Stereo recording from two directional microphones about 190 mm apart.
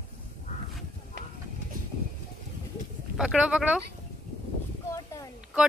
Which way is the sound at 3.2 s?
5° right (ahead or behind).